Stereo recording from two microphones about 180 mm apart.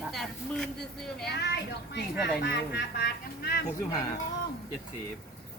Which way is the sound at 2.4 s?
60° left (ahead or behind).